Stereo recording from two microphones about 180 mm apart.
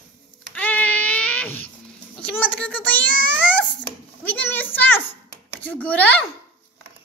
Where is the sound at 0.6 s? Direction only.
10° left (ahead or behind).